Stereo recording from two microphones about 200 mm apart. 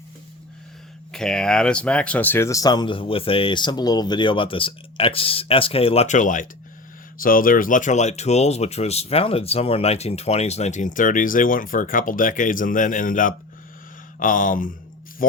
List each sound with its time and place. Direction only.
1.1 s speech: 5° left (ahead or behind); by 13.3 s 45° left (ahead or behind)
14.2 s a sound: 40° left (ahead or behind)
15.2 s speech: 45° left (ahead or behind)